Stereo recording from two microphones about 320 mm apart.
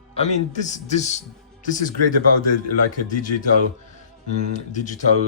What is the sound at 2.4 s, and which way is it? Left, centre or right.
Speech, left.